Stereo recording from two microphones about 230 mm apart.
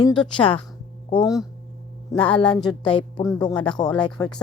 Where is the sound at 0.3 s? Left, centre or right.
Left.